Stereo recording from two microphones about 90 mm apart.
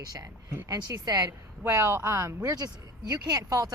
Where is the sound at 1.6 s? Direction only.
30° right (ahead or behind).